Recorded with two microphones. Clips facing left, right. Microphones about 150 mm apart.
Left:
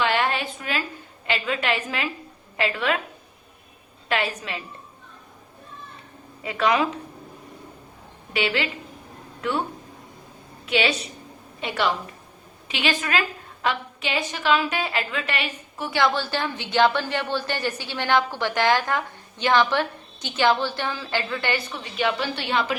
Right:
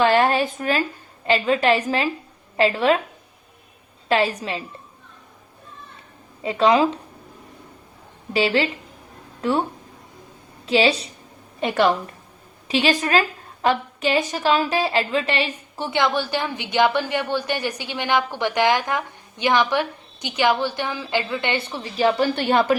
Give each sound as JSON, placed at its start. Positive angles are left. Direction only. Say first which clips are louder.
{"t": 0.0, "sound": "a sound", "louder": "right 6 dB", "side_deg": -40}
{"t": 1.3, "sound": "a woman's voice", "louder": "right 7 dB", "side_deg": -35}
{"t": 4.1, "sound": "a woman's voice", "louder": "right 6 dB", "side_deg": -30}
{"t": 6.4, "sound": "a woman's voice", "louder": "right 5 dB", "side_deg": -30}
{"t": 8.3, "sound": "a woman's voice", "louder": "right 5 dB", "side_deg": -35}
{"t": 10.7, "sound": "a woman's voice", "louder": "right 5 dB", "side_deg": -35}
{"t": 11.6, "sound": "a woman's voice", "louder": "right 6 dB", "side_deg": -45}
{"t": 12.6, "sound": "a woman's voice", "louder": "right 6 dB", "side_deg": -35}